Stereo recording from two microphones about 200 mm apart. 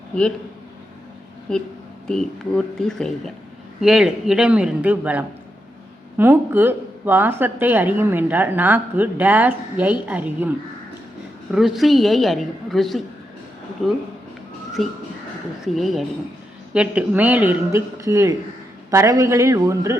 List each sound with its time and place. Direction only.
2.0 s a woman's voice: centre (ahead or behind)
11.5 s a woman's voice: centre (ahead or behind)